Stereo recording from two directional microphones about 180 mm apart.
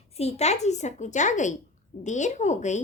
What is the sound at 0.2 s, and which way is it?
A woman's voice, 35° left (ahead or behind).